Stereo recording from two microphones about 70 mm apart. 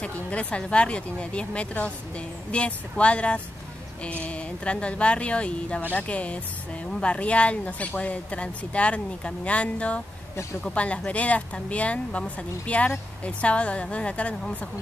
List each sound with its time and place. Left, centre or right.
0.0 s speech: centre